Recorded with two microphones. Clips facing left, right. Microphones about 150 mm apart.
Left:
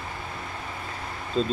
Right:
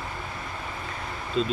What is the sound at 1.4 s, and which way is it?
Speech, 35° left (ahead or behind).